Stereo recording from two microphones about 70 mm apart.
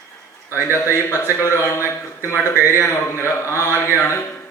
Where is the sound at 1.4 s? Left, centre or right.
Left.